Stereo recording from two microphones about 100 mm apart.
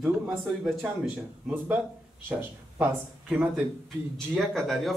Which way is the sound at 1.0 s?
15° right (ahead or behind).